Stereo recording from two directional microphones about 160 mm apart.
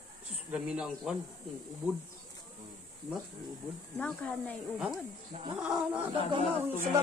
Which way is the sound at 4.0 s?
5° left (ahead or behind).